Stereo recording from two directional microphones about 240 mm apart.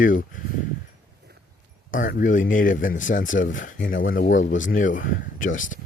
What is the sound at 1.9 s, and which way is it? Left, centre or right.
Speech, left.